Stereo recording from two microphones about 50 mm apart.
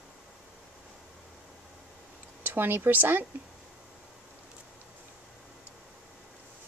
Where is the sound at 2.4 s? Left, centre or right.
Right.